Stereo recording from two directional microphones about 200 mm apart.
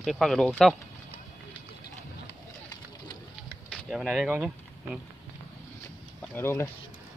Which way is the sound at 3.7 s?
Centre (ahead or behind).